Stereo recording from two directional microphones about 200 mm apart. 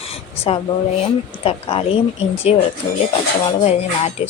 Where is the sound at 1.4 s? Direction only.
30° left (ahead or behind).